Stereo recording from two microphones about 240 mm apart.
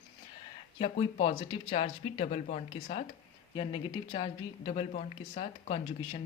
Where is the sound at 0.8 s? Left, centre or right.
Left.